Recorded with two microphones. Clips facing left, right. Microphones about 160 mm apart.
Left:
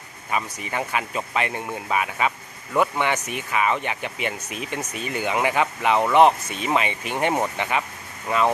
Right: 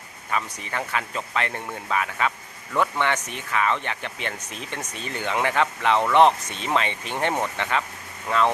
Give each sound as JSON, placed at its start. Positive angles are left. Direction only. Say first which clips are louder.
{"t": 0.3, "sound": "speech", "louder": "left 1 dB", "side_deg": 15}